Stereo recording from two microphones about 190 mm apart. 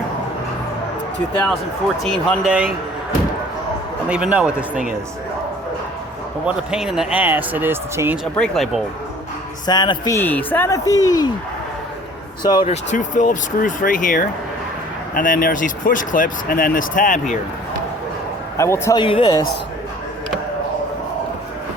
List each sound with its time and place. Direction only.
2.0 s speech: centre (ahead or behind)
4.1 s speech: 5° right (ahead or behind)
6.4 s speech: 5° right (ahead or behind)
9.6 s speech: 20° left (ahead or behind)
12.4 s speech: 25° left (ahead or behind)
12.6 s speech: 35° left (ahead or behind)
18.5 s speech: 15° left (ahead or behind)
19.0 s speech: 25° left (ahead or behind)